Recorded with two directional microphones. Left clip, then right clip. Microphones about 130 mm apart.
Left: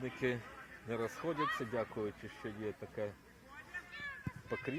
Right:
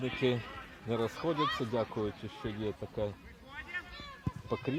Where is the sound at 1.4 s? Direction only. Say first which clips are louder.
Right 3 dB; 90° right.